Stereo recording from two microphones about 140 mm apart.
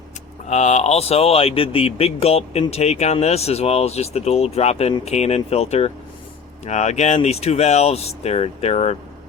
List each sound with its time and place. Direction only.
0.4 s speech: 55° left (ahead or behind)